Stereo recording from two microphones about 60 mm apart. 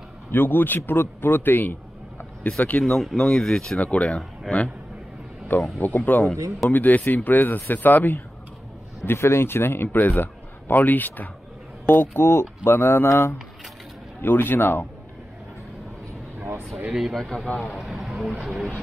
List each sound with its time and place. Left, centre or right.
0.3 s a man's voice: left
2.4 s speech: left
2.8 s speech: centre
3.8 s speech: left
4.5 s speech: centre
5.8 s a man's voice: left
9.0 s a man's voice: left
14.2 s a man's voice: left
16.3 s air conditioning: right
16.9 s speech: centre
17.6 s a sound: centre
18.4 s speech: centre